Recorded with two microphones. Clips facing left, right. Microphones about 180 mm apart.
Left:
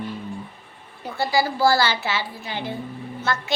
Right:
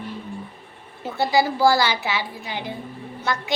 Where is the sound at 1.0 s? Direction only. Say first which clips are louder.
Right 2 dB; 20° right (ahead or behind).